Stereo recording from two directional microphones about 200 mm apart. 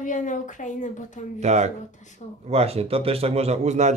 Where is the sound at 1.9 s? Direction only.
35° left (ahead or behind).